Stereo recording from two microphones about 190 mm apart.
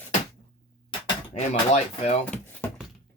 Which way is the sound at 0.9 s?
35° left (ahead or behind).